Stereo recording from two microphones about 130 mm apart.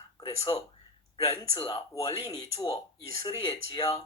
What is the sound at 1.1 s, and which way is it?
Speech, 25° left (ahead or behind).